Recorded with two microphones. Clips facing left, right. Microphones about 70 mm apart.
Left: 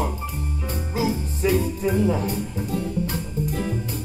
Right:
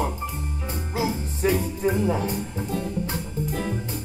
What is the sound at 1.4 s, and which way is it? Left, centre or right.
Music, right.